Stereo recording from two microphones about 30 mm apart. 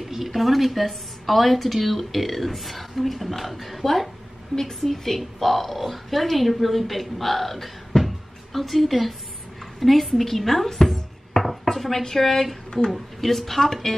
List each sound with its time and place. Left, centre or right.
0.0 s a woman's voice: centre
4.6 s a woman's voice: centre
7.9 s a sound: left
8.5 s a woman's voice: centre